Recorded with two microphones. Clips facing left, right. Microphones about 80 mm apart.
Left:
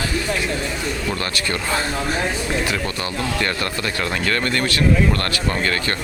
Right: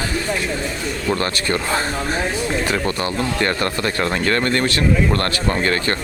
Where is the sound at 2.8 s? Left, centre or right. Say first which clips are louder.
Right 3 dB; right.